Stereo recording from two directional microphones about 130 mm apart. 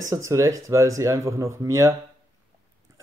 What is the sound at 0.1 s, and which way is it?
Speech, 25° right (ahead or behind).